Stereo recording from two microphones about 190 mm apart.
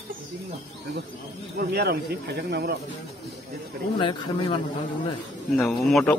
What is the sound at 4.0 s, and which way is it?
Speech, 25° left (ahead or behind).